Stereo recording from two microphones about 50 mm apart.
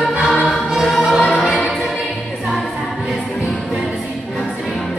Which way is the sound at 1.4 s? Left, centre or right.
Centre.